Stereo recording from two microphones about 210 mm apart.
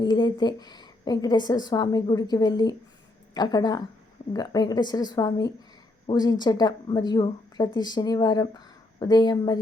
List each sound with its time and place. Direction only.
0.0 s speech: 20° left (ahead or behind)